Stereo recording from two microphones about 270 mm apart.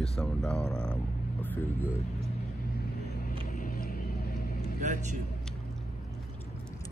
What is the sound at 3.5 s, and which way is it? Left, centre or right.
Vehicle, left.